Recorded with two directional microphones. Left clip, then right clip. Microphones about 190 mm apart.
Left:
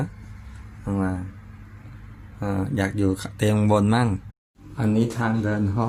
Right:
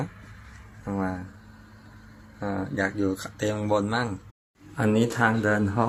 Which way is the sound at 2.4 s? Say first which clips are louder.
Left 1 dB; 20° left (ahead or behind).